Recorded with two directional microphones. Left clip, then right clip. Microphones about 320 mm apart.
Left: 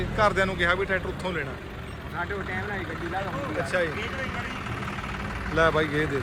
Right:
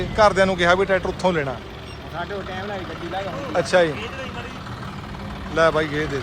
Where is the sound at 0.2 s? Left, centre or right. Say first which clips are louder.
Right 7 dB; centre.